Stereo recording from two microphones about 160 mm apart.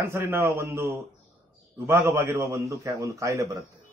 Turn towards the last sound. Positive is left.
turn(degrees=-20)  # may be behind; listen again after turning